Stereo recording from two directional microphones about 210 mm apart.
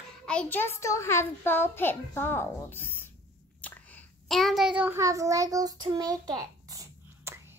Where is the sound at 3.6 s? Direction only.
10° left (ahead or behind).